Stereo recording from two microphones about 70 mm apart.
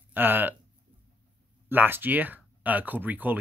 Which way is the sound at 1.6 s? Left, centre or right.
Right.